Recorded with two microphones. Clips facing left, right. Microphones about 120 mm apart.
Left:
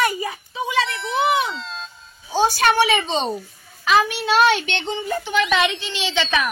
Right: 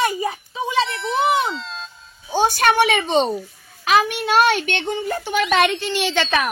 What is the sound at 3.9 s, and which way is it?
Speech, 50° right (ahead or behind).